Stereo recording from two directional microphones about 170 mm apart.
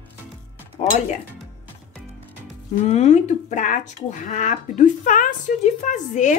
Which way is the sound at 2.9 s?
40° left (ahead or behind).